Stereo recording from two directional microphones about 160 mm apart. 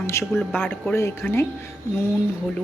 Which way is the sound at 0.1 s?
15° left (ahead or behind).